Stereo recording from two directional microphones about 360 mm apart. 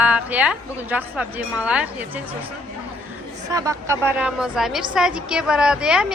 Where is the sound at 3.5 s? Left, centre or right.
Centre.